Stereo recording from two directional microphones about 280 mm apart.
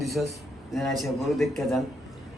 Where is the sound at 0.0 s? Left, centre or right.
Centre.